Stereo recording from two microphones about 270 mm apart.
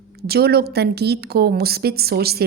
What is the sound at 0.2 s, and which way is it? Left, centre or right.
A woman's voice, right.